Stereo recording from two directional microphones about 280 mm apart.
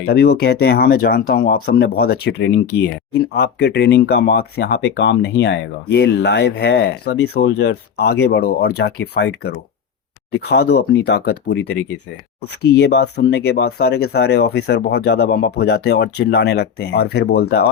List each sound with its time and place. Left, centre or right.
0.0 s speech: left